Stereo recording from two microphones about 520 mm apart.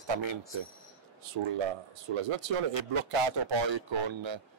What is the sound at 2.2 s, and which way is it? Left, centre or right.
A man's voice, right.